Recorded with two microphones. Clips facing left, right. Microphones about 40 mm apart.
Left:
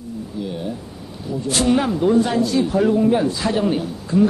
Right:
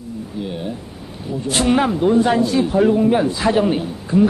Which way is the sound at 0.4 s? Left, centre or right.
Right.